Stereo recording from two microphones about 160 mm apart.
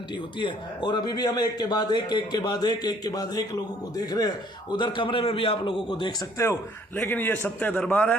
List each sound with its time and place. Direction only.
0.3 s a man's voice: 30° left (ahead or behind); by 8.1 s 10° left (ahead or behind)